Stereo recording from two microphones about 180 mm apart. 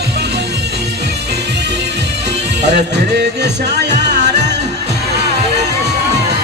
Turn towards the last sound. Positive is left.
turn(degrees=-70)  # may be behind; listen again after turning